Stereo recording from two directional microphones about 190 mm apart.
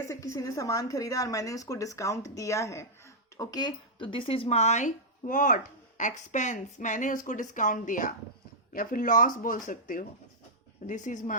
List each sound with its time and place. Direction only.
0.0 s a woman's voice: 15° left (ahead or behind); by 11.3 s 40° left (ahead or behind)